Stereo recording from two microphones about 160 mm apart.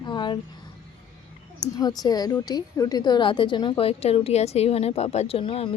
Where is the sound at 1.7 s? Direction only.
25° left (ahead or behind).